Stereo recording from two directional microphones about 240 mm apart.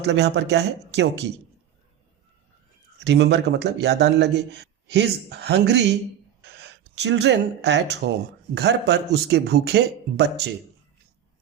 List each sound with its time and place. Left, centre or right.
0.0 s a man's voice: right
3.0 s a man's voice: right